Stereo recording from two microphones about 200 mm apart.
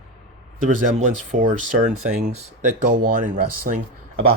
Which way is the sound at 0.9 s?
45° right (ahead or behind).